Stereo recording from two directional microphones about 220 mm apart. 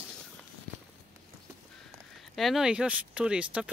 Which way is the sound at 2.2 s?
Centre (ahead or behind).